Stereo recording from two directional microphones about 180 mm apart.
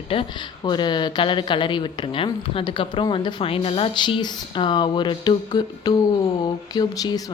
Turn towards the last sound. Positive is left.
turn(degrees=20)  # may be behind; listen again after turning